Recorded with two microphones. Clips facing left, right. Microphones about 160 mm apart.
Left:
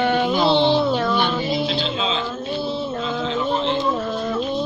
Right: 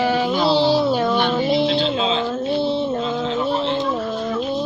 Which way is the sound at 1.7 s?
45° right (ahead or behind).